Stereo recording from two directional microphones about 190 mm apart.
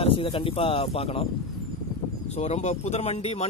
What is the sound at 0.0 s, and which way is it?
Speech, 30° left (ahead or behind).